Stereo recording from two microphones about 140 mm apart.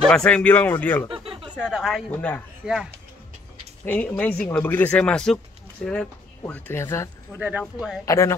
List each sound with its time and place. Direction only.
0.0 s speech: 5° left (ahead or behind)
1.1 s a sound: 40° right (ahead or behind)
1.6 s speech: 5° right (ahead or behind)
2.0 s speech: 10° left (ahead or behind)
2.6 s speech: 5° right (ahead or behind)
3.8 s speech: 10° left (ahead or behind)
7.3 s speech: 10° right (ahead or behind)
8.0 s speech: 20° left (ahead or behind)